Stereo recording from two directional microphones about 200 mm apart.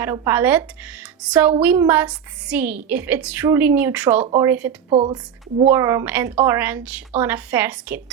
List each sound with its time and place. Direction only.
0.0 s a woman's voice: 10° right (ahead or behind)
4.9 s speech: 25° right (ahead or behind)
5.6 s a woman's voice: 15° right (ahead or behind)